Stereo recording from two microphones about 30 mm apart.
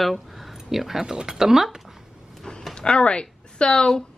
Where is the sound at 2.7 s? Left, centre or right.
Left.